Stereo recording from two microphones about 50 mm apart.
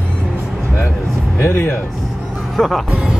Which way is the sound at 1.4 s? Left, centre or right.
Left.